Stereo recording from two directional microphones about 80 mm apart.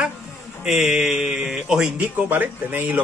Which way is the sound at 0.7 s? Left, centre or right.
Centre.